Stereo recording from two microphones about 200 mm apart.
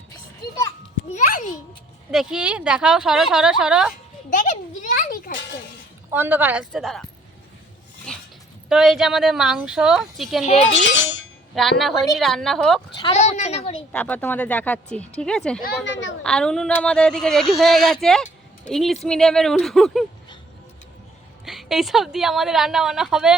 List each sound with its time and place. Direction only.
2.0 s speech: 5° right (ahead or behind)
4.3 s a sound: 40° left (ahead or behind)
5.3 s a sound: 60° left (ahead or behind)
6.1 s speech: 10° right (ahead or behind)
8.1 s dog: 5° left (ahead or behind)
8.7 s speech: centre (ahead or behind)
10.9 s music: 65° left (ahead or behind)
11.5 s speech: centre (ahead or behind)
13.1 s a woman's voice: 35° left (ahead or behind)
13.9 s speech: 5° left (ahead or behind)
15.6 s speech: 60° left (ahead or behind)
16.2 s speech: 5° left (ahead or behind)
21.4 s speech: centre (ahead or behind)